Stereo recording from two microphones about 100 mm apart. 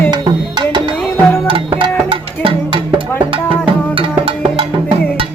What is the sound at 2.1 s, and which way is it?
Music, 65° right (ahead or behind).